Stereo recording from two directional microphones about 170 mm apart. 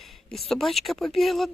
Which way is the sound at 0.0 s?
Centre (ahead or behind).